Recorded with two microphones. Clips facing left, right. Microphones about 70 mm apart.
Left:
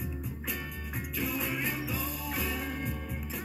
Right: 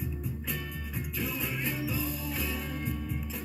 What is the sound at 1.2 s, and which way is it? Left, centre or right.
Music, centre.